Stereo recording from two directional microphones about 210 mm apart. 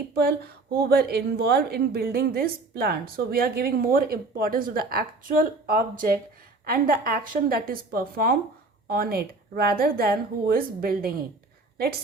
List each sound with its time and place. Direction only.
0.1 s a woman's voice: 45° right (ahead or behind)